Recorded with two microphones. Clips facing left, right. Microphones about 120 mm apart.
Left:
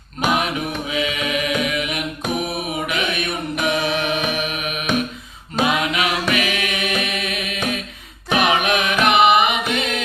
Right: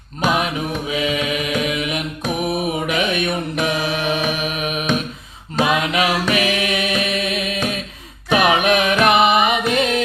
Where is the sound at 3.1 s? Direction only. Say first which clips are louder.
Right 3 dB; 35° right (ahead or behind).